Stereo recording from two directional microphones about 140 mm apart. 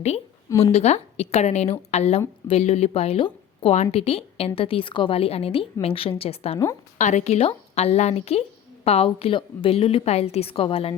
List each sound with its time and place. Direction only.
0.6 s speech: 50° left (ahead or behind)
7.0 s speech: 55° left (ahead or behind)